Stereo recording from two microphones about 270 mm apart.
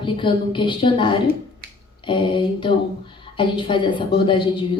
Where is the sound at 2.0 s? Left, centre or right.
Centre.